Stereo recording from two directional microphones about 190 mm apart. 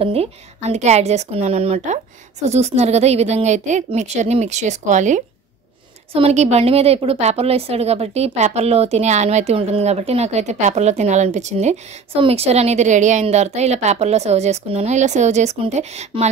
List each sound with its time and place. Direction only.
0.0 s a woman's voice: 30° right (ahead or behind)